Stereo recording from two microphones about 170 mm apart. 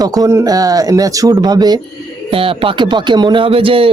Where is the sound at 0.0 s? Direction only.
20° right (ahead or behind).